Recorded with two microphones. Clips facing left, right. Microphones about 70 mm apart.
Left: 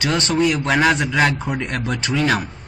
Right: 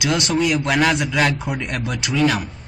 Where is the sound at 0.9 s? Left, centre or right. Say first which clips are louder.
Left 2 dB; left.